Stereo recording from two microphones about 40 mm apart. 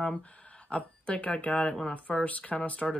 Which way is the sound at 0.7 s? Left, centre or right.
Left.